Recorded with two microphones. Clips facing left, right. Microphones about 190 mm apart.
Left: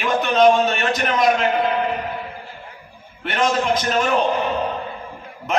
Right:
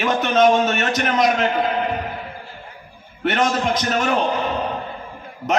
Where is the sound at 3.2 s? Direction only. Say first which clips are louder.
Right 1 dB; 40° right (ahead or behind).